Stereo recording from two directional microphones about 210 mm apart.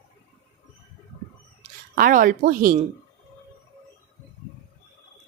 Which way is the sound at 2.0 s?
40° right (ahead or behind).